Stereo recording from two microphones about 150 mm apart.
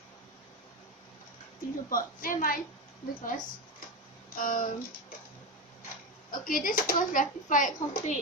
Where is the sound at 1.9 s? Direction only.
70° left (ahead or behind).